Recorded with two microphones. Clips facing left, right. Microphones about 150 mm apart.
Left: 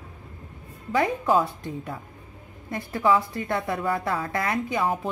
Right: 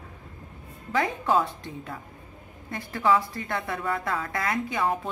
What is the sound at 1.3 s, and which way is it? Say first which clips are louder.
A woman's voice: left 2 dB; 20° left (ahead or behind).